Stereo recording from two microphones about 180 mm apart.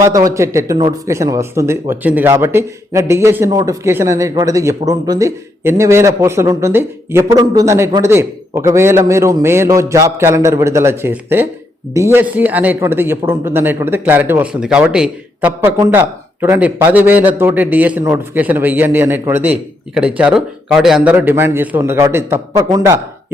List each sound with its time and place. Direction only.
0.0 s a man's voice: 20° right (ahead or behind)